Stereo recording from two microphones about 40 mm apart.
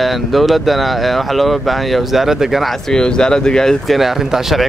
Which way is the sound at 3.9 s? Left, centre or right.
Centre.